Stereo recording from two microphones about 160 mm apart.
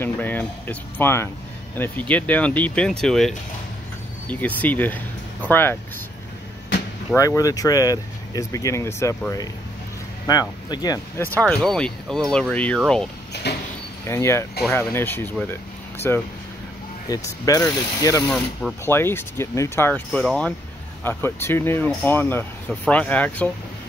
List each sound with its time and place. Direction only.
0.0 s speech: 10° left (ahead or behind)
7.2 s speech: 20° left (ahead or behind)
10.3 s speech: 25° left (ahead or behind)
11.3 s speech: 5° left (ahead or behind)
13.3 s sliding door: 90° left
14.0 s speech: 15° left (ahead or behind)
18.2 s speech: 5° left (ahead or behind)
18.9 s speech: 15° left (ahead or behind)